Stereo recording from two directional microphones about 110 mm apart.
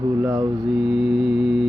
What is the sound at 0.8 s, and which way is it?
Mantra, centre (ahead or behind).